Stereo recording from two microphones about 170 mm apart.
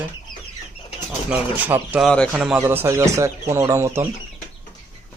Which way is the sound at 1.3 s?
10° right (ahead or behind).